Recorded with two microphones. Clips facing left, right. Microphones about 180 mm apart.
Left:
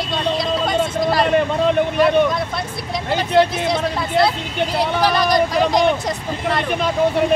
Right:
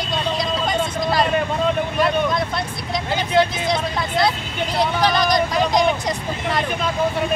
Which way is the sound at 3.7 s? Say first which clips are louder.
Left 2 dB; 5° left (ahead or behind).